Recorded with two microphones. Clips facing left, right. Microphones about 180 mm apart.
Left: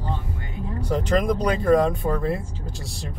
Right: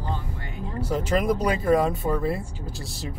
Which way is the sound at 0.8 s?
5° right (ahead or behind).